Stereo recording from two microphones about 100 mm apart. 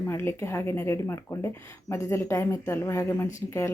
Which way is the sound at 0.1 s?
25° left (ahead or behind).